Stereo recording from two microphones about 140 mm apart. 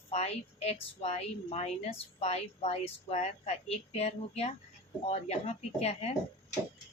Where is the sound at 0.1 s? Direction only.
50° left (ahead or behind).